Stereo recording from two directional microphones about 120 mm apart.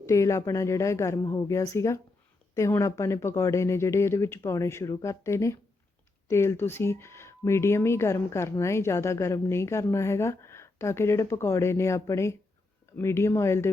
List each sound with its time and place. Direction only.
0.0 s speech: 25° left (ahead or behind)